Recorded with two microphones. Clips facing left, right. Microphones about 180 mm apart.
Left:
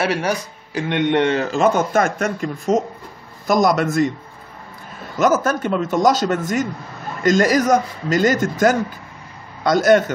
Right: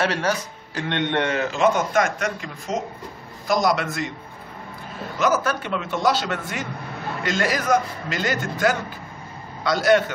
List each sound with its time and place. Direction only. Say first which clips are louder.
0.0 s a man's voice: left 2 dB; 10° left (ahead or behind)
1.2 s a man's voice: left 4 dB; 35° left (ahead or behind)
5.2 s a man's voice: left 5 dB; 45° left (ahead or behind)